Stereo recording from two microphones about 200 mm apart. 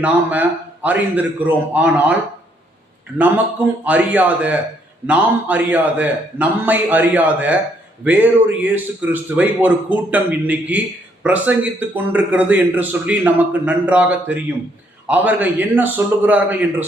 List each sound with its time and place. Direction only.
0.0 s a man's voice: 10° right (ahead or behind)
3.2 s a man's voice: 10° right (ahead or behind)